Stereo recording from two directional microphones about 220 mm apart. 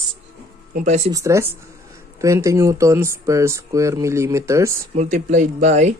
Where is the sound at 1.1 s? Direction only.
15° right (ahead or behind).